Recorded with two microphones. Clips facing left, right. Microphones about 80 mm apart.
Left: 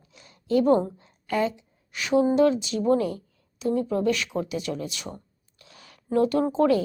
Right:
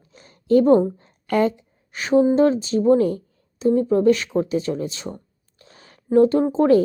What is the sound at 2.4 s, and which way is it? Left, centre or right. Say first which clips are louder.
A woman's voice: right 4 dB; right.